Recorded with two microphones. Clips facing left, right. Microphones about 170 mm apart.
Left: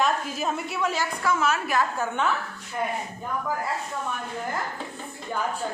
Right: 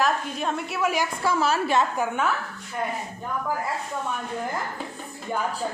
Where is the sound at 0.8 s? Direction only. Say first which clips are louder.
Right 4 dB; 10° right (ahead or behind).